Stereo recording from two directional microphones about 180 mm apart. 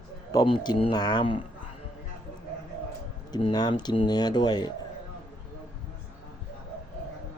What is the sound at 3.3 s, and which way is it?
Speech, 20° left (ahead or behind).